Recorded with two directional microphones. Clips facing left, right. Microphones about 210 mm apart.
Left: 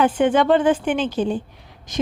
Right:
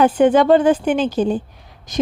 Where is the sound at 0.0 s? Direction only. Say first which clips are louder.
Right 4 dB; 40° right (ahead or behind).